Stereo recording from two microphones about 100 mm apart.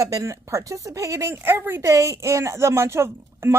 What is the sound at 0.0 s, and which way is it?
Speech, 35° right (ahead or behind).